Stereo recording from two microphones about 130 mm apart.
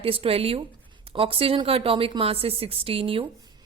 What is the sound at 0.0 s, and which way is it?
Speech, 45° right (ahead or behind).